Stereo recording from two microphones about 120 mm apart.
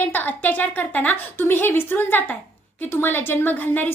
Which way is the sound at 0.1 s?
15° left (ahead or behind).